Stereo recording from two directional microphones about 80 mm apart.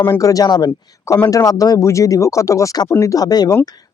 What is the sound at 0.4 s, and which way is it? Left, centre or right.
Speech, left.